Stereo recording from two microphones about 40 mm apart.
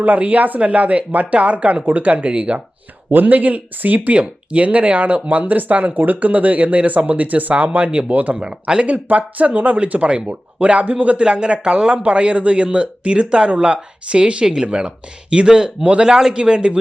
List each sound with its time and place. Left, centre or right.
0.0 s speech: right
3.1 s speech: right
4.1 s speech: right
7.9 s speech: right
8.4 s speech: right
11.3 s speech: right
15.8 s speech: right
16.0 s speech: centre